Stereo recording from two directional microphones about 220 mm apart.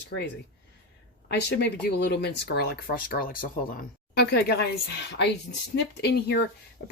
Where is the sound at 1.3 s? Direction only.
50° left (ahead or behind).